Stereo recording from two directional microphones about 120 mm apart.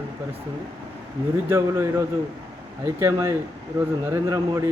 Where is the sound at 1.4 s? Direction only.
20° right (ahead or behind).